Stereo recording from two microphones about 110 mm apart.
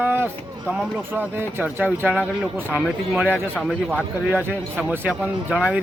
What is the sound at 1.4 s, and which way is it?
Speech, 20° right (ahead or behind).